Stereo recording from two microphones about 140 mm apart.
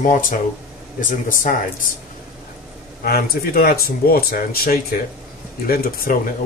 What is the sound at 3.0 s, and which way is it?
Speech, 90° left.